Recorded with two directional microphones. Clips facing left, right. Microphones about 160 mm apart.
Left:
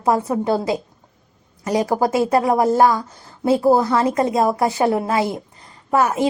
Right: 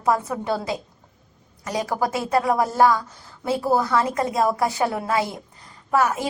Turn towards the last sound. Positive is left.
turn(degrees=25)  # may be behind; listen again after turning